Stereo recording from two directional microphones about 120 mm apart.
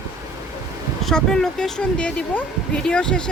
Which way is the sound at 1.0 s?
5° left (ahead or behind).